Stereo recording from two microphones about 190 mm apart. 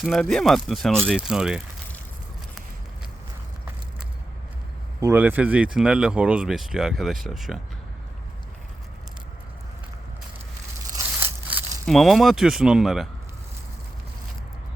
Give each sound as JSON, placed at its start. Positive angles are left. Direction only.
{"t": 0.0, "sound": "speech", "side_deg": 0}
{"t": 4.9, "sound": "speech", "side_deg": -10}
{"t": 10.8, "sound": "a sound", "side_deg": -15}
{"t": 11.9, "sound": "speech", "side_deg": 0}